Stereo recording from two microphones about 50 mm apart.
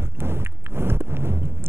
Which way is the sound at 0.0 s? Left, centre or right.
Right.